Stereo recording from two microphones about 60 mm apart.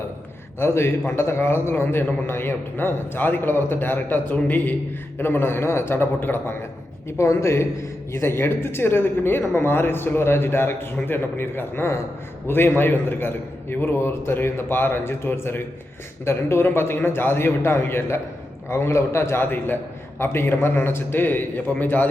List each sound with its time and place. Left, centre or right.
0.6 s a man's voice: left
7.2 s a man's voice: left
19.5 s speech: left